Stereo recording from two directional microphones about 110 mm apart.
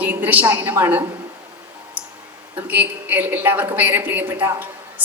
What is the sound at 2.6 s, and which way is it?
A man's voice, 15° right (ahead or behind).